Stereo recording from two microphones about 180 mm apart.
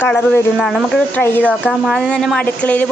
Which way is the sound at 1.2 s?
10° left (ahead or behind).